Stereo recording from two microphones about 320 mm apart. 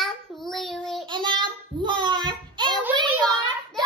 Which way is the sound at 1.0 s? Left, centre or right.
Centre.